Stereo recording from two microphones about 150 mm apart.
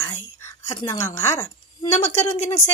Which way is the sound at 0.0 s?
20° left (ahead or behind).